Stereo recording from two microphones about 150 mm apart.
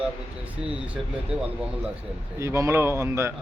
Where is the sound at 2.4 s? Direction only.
20° right (ahead or behind).